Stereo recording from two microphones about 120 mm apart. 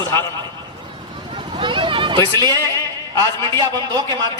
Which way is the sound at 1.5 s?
45° right (ahead or behind).